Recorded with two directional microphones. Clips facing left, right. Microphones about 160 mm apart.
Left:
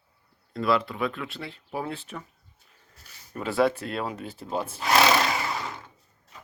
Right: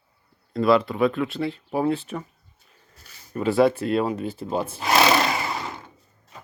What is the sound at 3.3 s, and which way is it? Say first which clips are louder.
Speech: right 5 dB; centre (ahead or behind).